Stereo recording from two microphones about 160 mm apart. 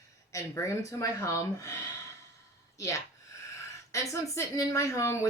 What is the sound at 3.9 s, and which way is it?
Speech, 20° left (ahead or behind).